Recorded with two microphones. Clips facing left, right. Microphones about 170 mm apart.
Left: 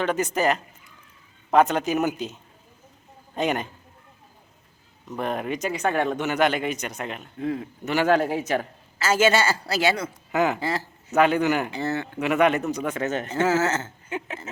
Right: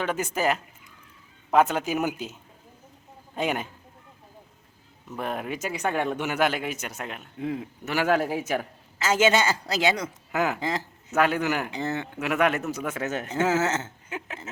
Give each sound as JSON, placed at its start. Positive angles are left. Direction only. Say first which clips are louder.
{"t": 0.0, "sound": "a man's voice", "louder": "left 3 dB", "side_deg": -5}
{"t": 5.0, "sound": "a man's voice", "louder": "left 3 dB", "side_deg": -5}
{"t": 10.3, "sound": "speech", "louder": "left 3 dB", "side_deg": -5}
{"t": 10.6, "sound": "a man's voice", "louder": "left 1 dB", "side_deg": -15}
{"t": 11.1, "sound": "speech", "louder": "left 4 dB", "side_deg": 0}
{"t": 11.7, "sound": "a man's voice", "louder": "left 2 dB", "side_deg": -15}
{"t": 12.2, "sound": "speech", "louder": "left 4 dB", "side_deg": 0}